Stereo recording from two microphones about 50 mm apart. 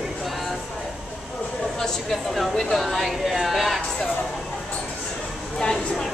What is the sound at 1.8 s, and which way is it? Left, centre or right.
Speech, centre.